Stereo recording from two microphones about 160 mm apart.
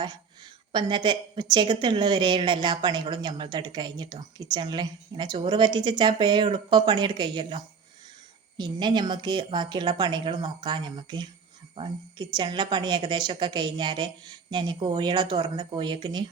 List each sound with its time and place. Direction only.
0.7 s a woman's voice: 30° right (ahead or behind)